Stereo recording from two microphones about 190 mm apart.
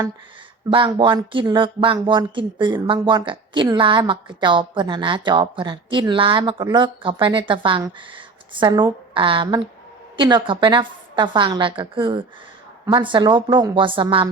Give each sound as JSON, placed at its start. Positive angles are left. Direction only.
{"t": 0.7, "sound": "speech", "side_deg": -25}